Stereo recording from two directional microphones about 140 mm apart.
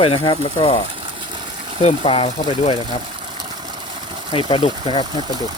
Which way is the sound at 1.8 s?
45° left (ahead or behind).